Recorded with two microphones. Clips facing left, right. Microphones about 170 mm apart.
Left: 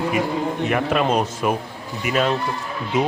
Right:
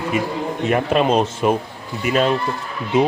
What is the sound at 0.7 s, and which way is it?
Speech, 25° right (ahead or behind).